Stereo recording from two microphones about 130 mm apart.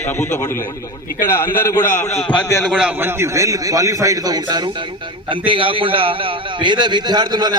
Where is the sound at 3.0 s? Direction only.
20° right (ahead or behind).